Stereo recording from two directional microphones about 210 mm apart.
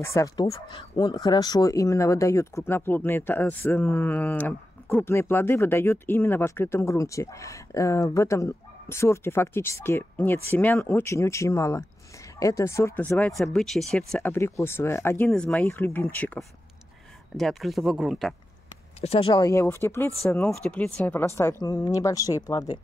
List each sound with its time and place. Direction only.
0.0 s speech: 15° left (ahead or behind); by 18.3 s centre (ahead or behind)
18.9 s speech: 30° left (ahead or behind)